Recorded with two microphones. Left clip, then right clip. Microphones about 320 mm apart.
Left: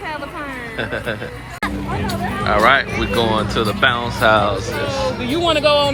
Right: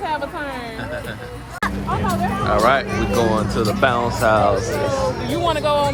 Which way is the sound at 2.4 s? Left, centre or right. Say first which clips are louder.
Left 3 dB; centre.